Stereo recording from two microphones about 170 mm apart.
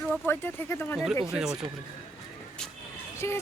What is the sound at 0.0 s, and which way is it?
Speech, 10° left (ahead or behind).